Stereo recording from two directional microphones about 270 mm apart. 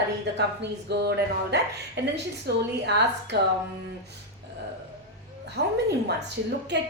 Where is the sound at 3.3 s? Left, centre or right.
Right.